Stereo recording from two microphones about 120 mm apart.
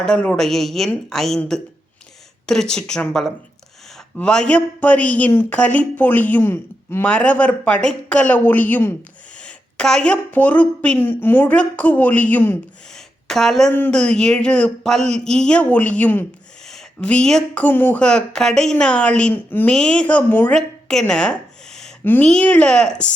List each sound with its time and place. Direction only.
0.0 s a woman's voice: 10° left (ahead or behind)
12.9 s a sound: 5° left (ahead or behind)
13.7 s a woman's voice: 10° left (ahead or behind)